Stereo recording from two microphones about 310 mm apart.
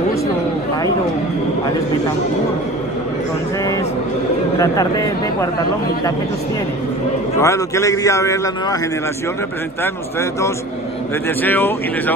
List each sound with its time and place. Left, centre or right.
4.6 s a man's voice: centre
7.3 s a man's voice: centre
11.4 s speech: centre